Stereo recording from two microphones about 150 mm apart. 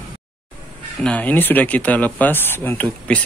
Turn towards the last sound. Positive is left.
turn(degrees=10)  # may be behind; listen again after turning